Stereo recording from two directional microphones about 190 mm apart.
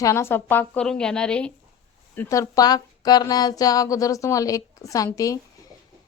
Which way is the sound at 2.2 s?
15° left (ahead or behind).